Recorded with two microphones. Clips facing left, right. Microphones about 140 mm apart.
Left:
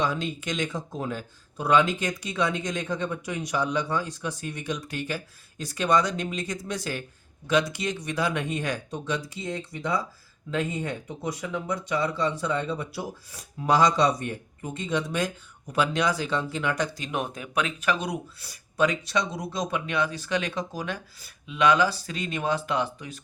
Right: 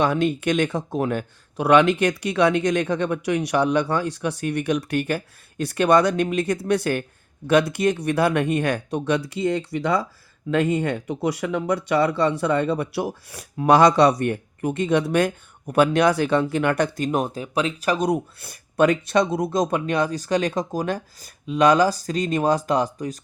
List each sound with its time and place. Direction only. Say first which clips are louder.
0.0 s speech: right 8 dB; 60° right (ahead or behind)
17.1 s speech: right 7 dB; 35° right (ahead or behind)